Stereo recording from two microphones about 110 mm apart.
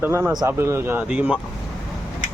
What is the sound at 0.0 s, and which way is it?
Speech, 20° right (ahead or behind).